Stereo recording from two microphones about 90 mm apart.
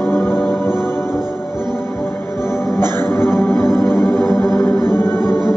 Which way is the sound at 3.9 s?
25° left (ahead or behind).